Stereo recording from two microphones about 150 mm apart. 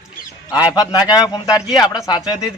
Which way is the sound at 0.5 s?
25° left (ahead or behind).